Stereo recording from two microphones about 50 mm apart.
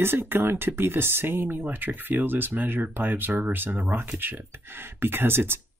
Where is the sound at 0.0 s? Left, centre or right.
Right.